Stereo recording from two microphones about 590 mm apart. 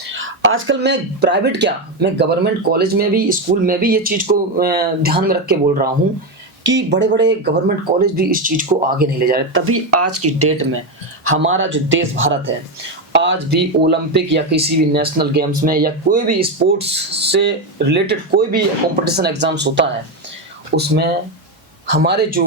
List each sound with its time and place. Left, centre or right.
0.2 s speech: centre